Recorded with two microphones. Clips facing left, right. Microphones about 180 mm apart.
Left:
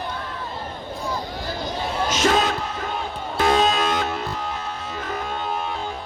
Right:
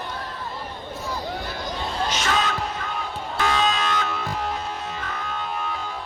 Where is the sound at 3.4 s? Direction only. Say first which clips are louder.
Left 4 dB; 40° left (ahead or behind).